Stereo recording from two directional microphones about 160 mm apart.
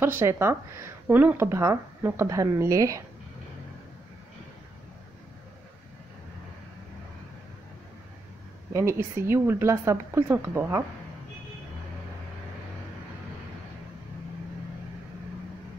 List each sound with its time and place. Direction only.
0.0 s speech: 15° right (ahead or behind)
8.7 s speech: 20° right (ahead or behind)